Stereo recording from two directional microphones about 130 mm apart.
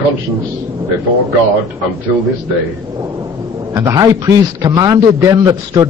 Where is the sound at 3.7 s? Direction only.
25° right (ahead or behind).